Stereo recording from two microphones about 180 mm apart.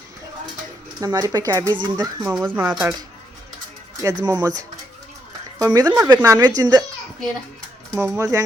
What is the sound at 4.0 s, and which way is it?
Speech, 20° right (ahead or behind).